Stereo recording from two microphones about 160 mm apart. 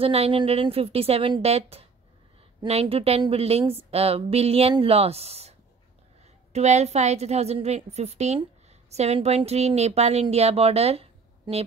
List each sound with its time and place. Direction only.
0.0 s a woman's voice: 35° right (ahead or behind)